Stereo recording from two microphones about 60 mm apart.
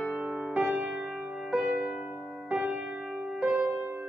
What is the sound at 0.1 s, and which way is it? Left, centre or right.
Music, centre.